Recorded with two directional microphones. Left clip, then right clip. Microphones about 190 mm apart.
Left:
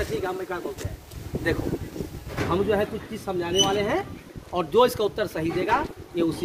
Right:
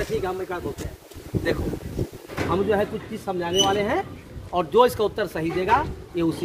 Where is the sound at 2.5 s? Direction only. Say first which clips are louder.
Right 1 dB; 10° right (ahead or behind).